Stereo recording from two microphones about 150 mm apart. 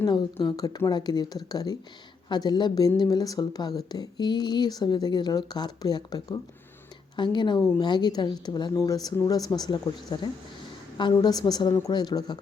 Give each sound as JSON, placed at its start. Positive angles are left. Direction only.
{"t": 0.3, "sound": "a woman's voice", "side_deg": 25}